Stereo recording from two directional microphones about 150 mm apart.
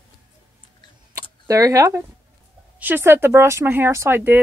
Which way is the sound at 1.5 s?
20° right (ahead or behind).